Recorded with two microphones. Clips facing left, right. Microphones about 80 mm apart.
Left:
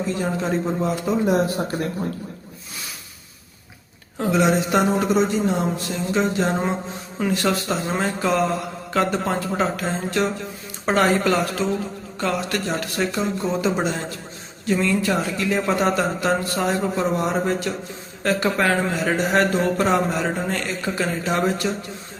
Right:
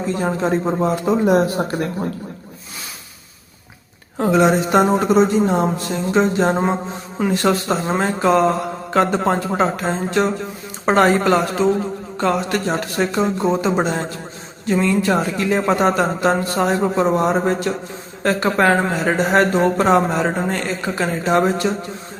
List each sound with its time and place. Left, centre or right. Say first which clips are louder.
0.1 s a man's voice: right 6 dB; right
1.3 s speech: right 4 dB; right
4.2 s speech: right 4 dB; right